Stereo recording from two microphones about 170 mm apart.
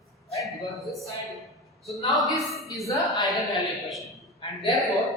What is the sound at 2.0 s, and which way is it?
Speech, 20° left (ahead or behind).